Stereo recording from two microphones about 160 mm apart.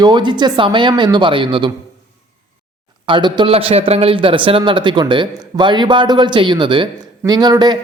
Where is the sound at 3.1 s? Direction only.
30° right (ahead or behind).